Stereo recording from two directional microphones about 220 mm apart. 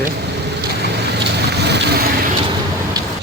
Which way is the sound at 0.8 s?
50° right (ahead or behind).